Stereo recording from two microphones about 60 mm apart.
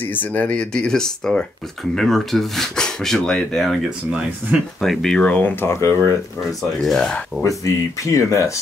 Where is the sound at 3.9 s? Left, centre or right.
Centre.